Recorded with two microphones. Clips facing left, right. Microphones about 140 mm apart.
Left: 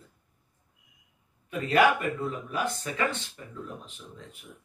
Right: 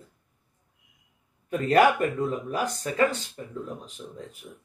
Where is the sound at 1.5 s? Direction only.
45° right (ahead or behind).